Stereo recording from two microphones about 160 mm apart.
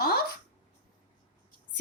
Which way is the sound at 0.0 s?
75° left (ahead or behind).